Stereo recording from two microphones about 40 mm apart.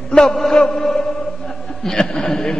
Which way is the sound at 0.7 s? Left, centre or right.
Centre.